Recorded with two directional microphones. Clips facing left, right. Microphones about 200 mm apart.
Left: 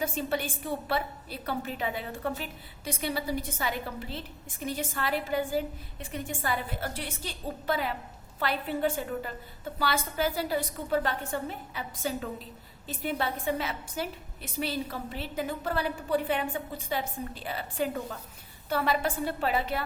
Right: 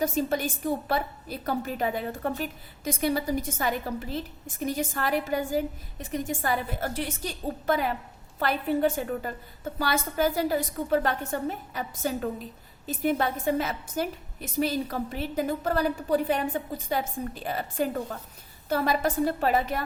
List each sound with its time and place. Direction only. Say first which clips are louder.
0.0 s a woman's voice: right 4 dB; 40° right (ahead or behind)